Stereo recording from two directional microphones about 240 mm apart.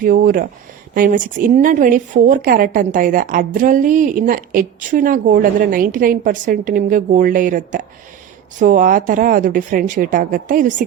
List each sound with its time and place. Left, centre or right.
0.0 s a woman's voice: right